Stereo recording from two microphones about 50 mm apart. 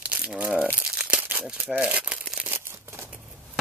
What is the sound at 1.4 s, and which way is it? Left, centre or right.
Speech, centre.